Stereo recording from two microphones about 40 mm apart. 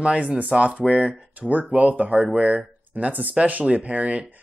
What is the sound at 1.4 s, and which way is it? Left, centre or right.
Speech, right.